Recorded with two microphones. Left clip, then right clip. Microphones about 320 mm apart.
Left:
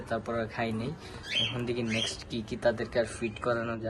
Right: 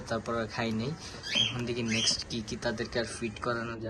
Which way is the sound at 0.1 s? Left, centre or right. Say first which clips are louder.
Even; centre.